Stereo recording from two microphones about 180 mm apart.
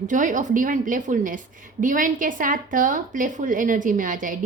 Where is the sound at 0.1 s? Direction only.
45° right (ahead or behind).